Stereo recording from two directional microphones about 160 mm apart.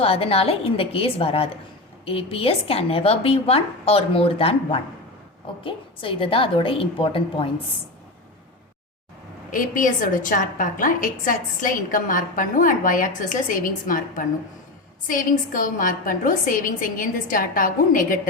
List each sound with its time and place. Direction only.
0.0 s speech: 35° left (ahead or behind)
9.5 s a woman's voice: 55° left (ahead or behind)